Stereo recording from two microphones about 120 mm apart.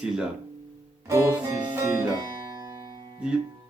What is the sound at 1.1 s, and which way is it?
Music, 25° right (ahead or behind).